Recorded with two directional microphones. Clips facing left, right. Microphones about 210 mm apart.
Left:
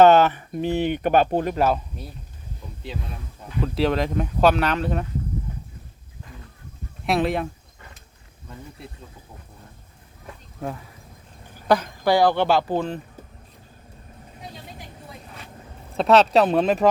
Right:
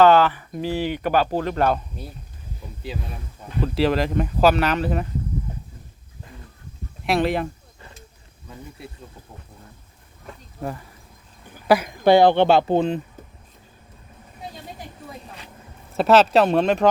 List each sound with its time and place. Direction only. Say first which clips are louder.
0.0 s speech: left 1 dB; 20° left (ahead or behind)
1.5 s speech: even; 5° left (ahead or behind)
7.0 s speech: right 1 dB; centre (ahead or behind)
10.6 s a woman's voice: right 1 dB; centre (ahead or behind)
12.0 s speech: right 4 dB; 25° right (ahead or behind)
16.0 s speech: right 1 dB; centre (ahead or behind)